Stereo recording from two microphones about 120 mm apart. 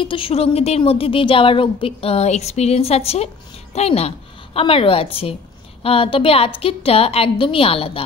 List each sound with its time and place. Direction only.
0.0 s a woman's voice: 50° left (ahead or behind)